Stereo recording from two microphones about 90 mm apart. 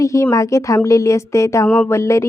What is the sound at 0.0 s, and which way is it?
Speech, 35° left (ahead or behind).